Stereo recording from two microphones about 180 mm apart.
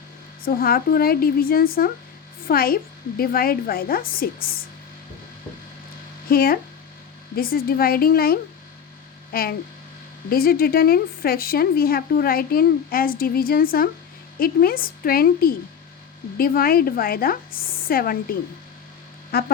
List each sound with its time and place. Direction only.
0.4 s speech: 55° left (ahead or behind)
6.2 s a woman's voice: 55° left (ahead or behind)